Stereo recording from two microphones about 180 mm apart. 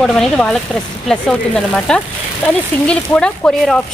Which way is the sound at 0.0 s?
5° left (ahead or behind).